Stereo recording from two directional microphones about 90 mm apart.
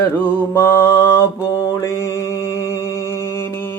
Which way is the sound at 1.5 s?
40° left (ahead or behind).